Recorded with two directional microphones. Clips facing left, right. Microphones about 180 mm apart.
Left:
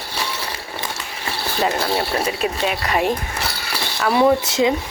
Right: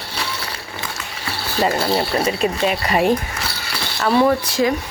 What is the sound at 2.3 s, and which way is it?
Speech, 5° left (ahead or behind).